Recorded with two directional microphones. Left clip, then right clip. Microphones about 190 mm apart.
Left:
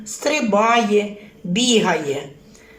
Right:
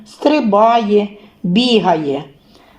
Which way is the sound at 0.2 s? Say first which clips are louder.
Right 6 dB; 25° right (ahead or behind).